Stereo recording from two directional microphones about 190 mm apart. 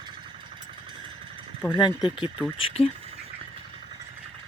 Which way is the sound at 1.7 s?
25° left (ahead or behind).